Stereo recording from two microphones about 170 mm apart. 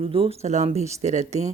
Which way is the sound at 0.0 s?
35° right (ahead or behind).